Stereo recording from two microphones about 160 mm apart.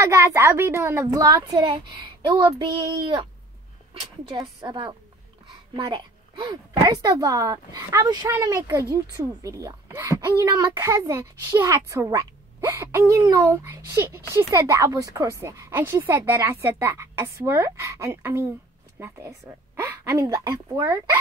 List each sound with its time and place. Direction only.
0.0 s speech: 20° right (ahead or behind)